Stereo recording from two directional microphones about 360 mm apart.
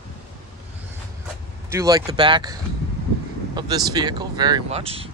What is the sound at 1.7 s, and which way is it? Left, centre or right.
Speech, centre.